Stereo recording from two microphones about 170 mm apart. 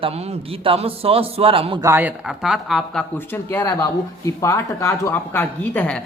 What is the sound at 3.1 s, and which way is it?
Speech, 10° left (ahead or behind).